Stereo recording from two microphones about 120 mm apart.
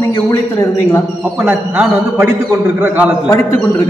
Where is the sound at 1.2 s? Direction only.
10° right (ahead or behind).